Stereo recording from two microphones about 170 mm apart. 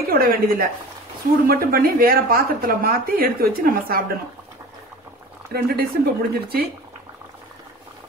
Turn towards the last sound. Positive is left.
turn(degrees=-65)  # may be behind; listen again after turning